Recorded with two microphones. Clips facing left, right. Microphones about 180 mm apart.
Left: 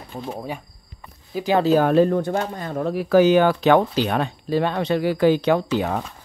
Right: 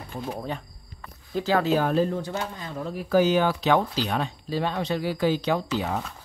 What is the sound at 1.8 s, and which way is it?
Speech, 65° left (ahead or behind).